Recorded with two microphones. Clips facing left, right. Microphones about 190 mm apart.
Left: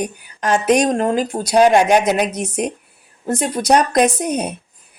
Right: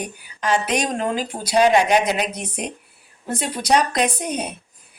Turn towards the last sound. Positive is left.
turn(degrees=45)  # may be behind; listen again after turning